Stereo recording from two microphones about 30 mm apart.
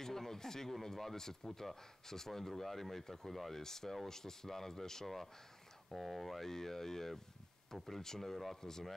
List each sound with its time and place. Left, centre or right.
0.0 s speech: centre